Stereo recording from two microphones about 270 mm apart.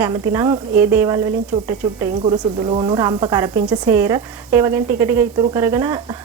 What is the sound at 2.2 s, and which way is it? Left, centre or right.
Speech, centre.